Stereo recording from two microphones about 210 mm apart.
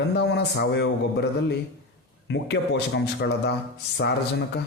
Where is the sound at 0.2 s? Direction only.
55° left (ahead or behind).